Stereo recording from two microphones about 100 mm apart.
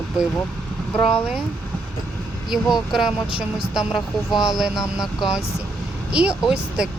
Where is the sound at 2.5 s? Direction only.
5° right (ahead or behind).